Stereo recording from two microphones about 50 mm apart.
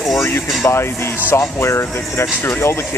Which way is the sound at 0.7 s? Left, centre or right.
Left.